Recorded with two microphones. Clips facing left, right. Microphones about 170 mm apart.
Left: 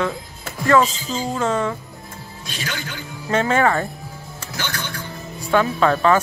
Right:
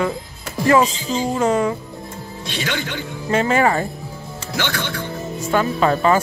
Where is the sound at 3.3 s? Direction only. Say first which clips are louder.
Right 1 dB; 5° right (ahead or behind).